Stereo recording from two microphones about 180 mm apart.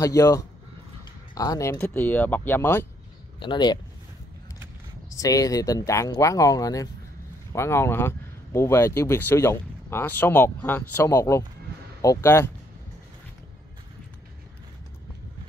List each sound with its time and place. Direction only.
0.0 s speech: 20° left (ahead or behind)
3.3 s speech: 25° left (ahead or behind)
5.1 s speech: 20° left (ahead or behind)